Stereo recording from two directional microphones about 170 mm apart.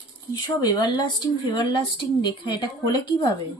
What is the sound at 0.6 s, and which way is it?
Speech, 25° left (ahead or behind).